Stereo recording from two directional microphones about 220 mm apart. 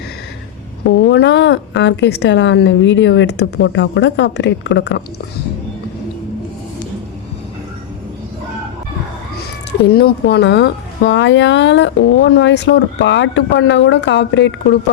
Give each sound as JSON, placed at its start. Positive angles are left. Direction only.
{"t": 0.9, "sound": "speech", "side_deg": 55}
{"t": 9.9, "sound": "speech", "side_deg": 45}